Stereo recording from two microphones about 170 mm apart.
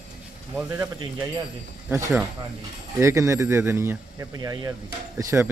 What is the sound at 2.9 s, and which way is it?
Speech, 15° right (ahead or behind).